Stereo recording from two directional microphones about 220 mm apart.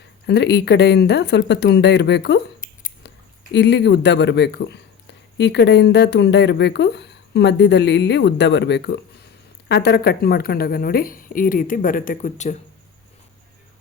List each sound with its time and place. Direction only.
0.3 s speech: 50° left (ahead or behind)
3.5 s a woman's voice: 50° left (ahead or behind); by 12.5 s 35° left (ahead or behind)